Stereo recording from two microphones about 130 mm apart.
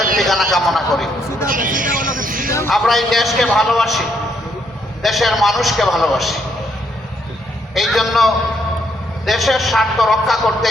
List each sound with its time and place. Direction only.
0.2 s a man's voice: centre (ahead or behind)
1.5 s a sound: 90° right
2.6 s a man's voice: centre (ahead or behind)
5.0 s a man's voice: centre (ahead or behind)
7.7 s a man's voice: centre (ahead or behind)